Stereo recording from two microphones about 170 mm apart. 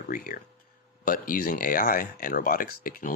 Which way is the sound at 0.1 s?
55° left (ahead or behind).